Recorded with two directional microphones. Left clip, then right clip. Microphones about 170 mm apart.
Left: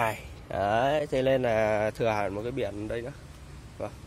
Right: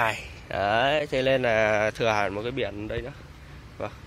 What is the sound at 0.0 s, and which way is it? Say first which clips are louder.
Speech: right 3 dB; 25° left (ahead or behind).